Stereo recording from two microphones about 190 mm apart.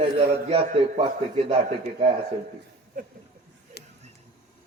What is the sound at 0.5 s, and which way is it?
Speech, 35° right (ahead or behind).